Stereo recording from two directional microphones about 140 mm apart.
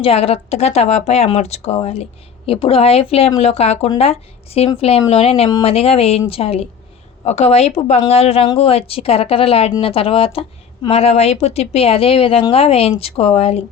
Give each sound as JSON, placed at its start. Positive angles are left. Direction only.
{"t": 0.0, "sound": "a woman's voice", "side_deg": 45}